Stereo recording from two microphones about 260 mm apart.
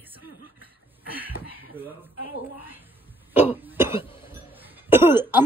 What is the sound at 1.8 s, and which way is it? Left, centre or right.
Speech, centre.